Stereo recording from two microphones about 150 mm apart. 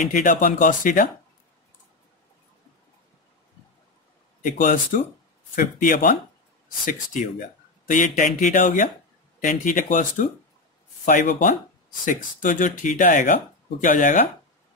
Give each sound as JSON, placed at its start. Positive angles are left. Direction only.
{"t": 0.1, "sound": "speech", "side_deg": 60}
{"t": 4.4, "sound": "speech", "side_deg": 60}